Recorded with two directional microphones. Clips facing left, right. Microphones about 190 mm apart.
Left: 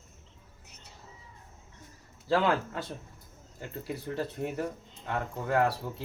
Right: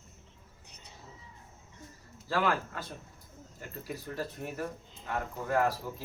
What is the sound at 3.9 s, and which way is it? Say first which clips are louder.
Speech: left 3 dB; 25° left (ahead or behind).